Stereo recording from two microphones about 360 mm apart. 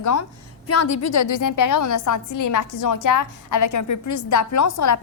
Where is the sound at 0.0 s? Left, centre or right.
Left.